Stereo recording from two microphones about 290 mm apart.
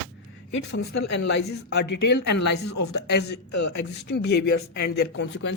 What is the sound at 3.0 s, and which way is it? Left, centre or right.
Speech, left.